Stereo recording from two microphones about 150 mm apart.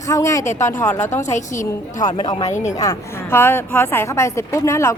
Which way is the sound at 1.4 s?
60° left (ahead or behind).